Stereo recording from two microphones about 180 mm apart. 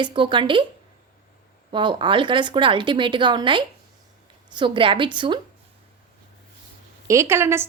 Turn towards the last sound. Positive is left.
turn(degrees=-15)  # may be behind; listen again after turning